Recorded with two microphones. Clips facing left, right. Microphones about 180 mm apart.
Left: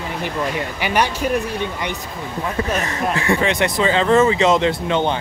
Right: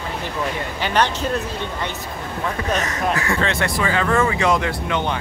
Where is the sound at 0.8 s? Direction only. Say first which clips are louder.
Even; 10° left (ahead or behind).